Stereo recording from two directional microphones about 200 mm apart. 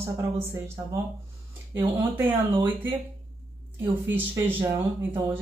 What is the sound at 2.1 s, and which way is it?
Speech, 10° right (ahead or behind).